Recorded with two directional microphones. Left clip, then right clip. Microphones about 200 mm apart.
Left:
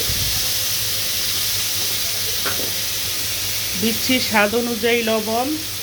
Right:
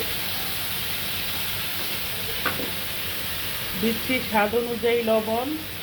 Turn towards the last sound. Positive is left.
turn(degrees=40)  # may be behind; listen again after turning